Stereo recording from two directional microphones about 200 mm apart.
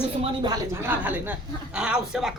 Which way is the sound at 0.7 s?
10° right (ahead or behind).